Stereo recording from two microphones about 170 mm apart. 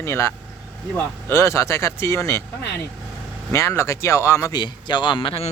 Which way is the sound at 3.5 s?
15° left (ahead or behind).